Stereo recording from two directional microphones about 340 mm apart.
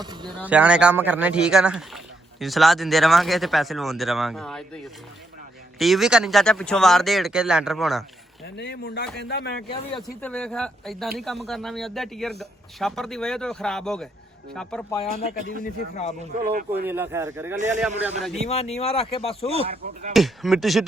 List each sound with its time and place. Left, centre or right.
0.0 s speech: centre
5.8 s speech: centre
8.5 s speech: left
9.7 s speech: centre
10.2 s speech: centre
15.6 s speech: centre
16.4 s speech: right
16.8 s speech: centre
18.4 s speech: centre
19.6 s speech: right
20.1 s speech: centre